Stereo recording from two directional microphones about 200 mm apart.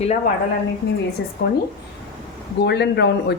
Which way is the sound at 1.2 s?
60° left (ahead or behind).